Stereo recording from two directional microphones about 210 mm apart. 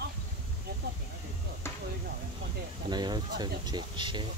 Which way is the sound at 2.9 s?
20° right (ahead or behind).